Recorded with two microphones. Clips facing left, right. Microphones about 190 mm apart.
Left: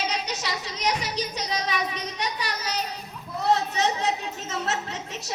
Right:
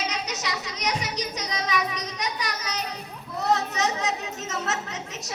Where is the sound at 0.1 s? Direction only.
30° left (ahead or behind).